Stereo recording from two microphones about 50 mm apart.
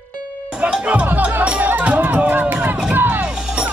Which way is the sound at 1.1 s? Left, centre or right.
Right.